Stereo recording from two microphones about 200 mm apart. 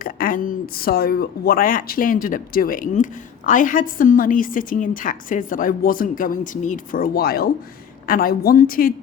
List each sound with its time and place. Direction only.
0.0 s speech: 45° left (ahead or behind)